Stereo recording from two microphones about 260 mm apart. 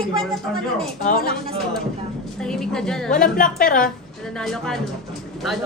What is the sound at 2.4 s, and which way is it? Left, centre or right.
Speech, centre.